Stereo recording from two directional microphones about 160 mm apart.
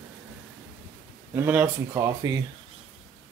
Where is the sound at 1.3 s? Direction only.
10° right (ahead or behind).